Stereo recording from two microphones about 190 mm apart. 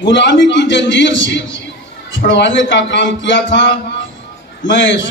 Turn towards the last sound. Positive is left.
turn(degrees=75)  # may be behind; listen again after turning